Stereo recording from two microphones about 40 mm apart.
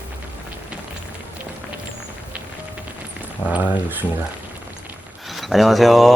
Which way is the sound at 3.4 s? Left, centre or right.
Left.